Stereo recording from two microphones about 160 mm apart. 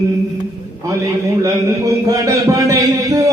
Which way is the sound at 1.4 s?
20° right (ahead or behind).